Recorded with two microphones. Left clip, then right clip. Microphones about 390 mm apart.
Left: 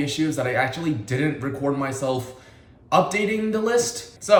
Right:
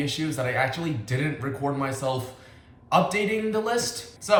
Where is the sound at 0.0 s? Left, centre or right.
Centre.